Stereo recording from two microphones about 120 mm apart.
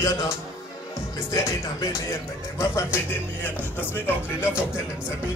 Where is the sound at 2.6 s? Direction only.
20° left (ahead or behind).